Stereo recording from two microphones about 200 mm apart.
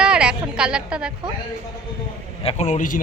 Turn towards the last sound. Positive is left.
turn(degrees=40)  # may be behind; listen again after turning